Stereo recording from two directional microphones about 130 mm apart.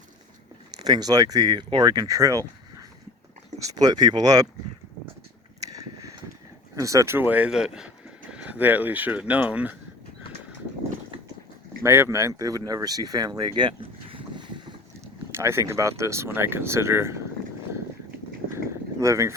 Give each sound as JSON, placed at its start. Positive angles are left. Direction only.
{"t": 0.9, "sound": "speech", "side_deg": -30}
{"t": 5.6, "sound": "a sound", "side_deg": -25}
{"t": 6.7, "sound": "speech", "side_deg": -25}
{"t": 11.8, "sound": "speech", "side_deg": -20}
{"t": 15.4, "sound": "speech", "side_deg": -20}
{"t": 18.5, "sound": "a sound", "side_deg": -25}